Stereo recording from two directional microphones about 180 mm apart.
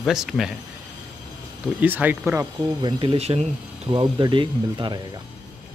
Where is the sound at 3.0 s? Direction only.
30° right (ahead or behind).